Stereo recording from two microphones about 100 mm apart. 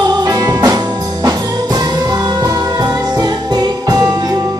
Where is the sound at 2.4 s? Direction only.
40° right (ahead or behind).